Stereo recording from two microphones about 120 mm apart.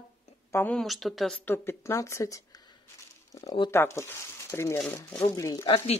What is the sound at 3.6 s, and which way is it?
Speech, 25° left (ahead or behind).